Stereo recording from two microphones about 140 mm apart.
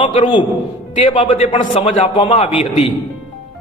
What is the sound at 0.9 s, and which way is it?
A man's voice, 45° left (ahead or behind).